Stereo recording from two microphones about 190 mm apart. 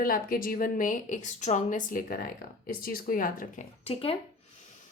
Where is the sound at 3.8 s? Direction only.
30° left (ahead or behind).